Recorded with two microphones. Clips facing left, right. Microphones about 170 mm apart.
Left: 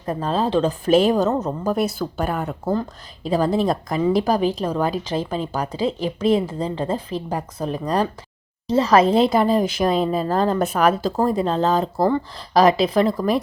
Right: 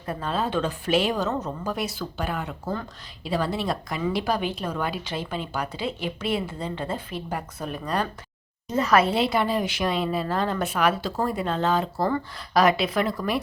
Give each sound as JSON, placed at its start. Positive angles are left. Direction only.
{"t": 0.0, "sound": "a woman's voice", "side_deg": 35}